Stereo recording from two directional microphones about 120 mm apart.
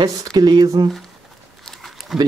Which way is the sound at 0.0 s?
30° right (ahead or behind).